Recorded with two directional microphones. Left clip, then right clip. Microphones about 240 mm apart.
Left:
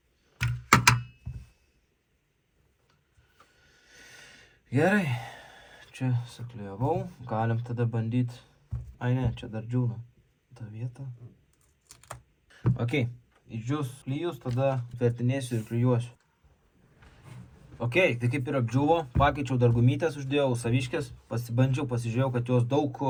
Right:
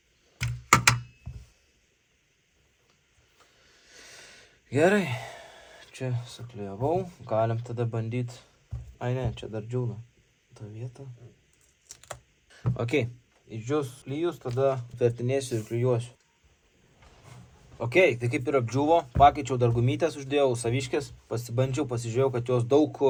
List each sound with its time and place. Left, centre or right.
0.7 s computer keyboard: centre
3.8 s a sound: right
6.9 s speech: right
12.7 s a man's voice: right
17.7 s speech: right